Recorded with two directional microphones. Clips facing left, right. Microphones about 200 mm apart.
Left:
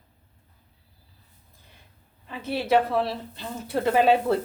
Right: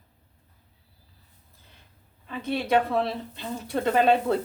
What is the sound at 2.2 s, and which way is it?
Speech, 5° left (ahead or behind).